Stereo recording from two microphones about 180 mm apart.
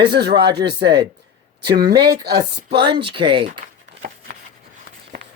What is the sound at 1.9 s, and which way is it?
Speech, 65° right (ahead or behind).